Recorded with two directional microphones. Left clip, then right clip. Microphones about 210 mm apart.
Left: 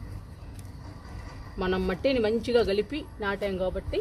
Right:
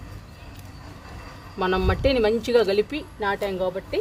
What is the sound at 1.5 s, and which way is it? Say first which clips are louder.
Speech: right 5 dB; 15° right (ahead or behind).